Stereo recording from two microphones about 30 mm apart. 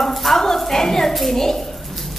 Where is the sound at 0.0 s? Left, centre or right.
Centre.